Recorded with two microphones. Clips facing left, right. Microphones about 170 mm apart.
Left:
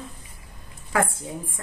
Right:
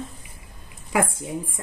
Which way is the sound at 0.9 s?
15° right (ahead or behind).